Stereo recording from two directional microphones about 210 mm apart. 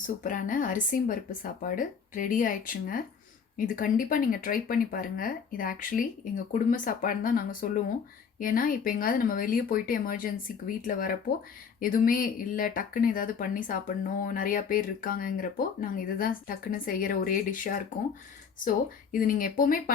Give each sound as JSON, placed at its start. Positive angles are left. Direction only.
{"t": 0.2, "sound": "speech", "side_deg": 40}
{"t": 19.1, "sound": "speech", "side_deg": 40}